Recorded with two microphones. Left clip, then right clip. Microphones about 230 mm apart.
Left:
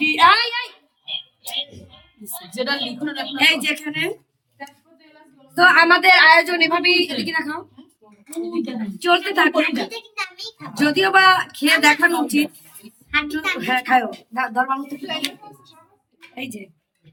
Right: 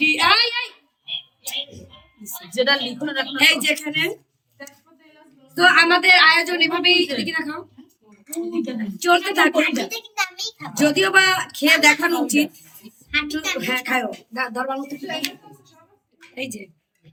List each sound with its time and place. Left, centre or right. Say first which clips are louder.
0.0 s a sound: left 2 dB; centre
2.5 s a woman's voice: right 4 dB; centre
3.3 s speech: even; centre
5.5 s a woman's voice: left 2 dB; centre
16.3 s speech: right 2 dB; centre